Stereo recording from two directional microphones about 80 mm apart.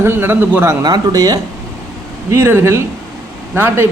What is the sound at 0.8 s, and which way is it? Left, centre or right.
Speech, right.